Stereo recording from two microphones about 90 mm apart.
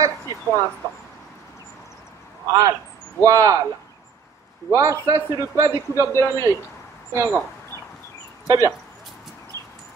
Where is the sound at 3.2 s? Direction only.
35° right (ahead or behind).